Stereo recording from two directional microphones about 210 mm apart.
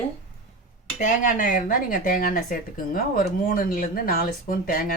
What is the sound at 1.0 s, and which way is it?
Speech, 35° left (ahead or behind).